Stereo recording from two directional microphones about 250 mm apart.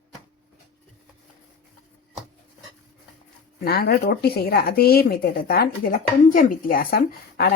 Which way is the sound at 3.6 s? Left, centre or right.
Left.